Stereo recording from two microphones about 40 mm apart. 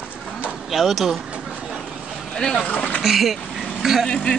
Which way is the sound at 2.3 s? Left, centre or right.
Centre.